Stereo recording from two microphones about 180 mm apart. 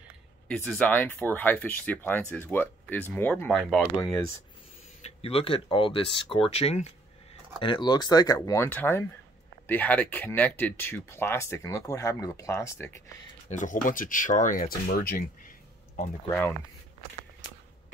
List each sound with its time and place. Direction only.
0.7 s speech: 10° left (ahead or behind)
3.9 s speech: 20° left (ahead or behind)
5.0 s speech: 35° left (ahead or behind); by 12.9 s 15° left (ahead or behind)
13.5 s speech: 45° left (ahead or behind)
16.3 s speech: 10° left (ahead or behind)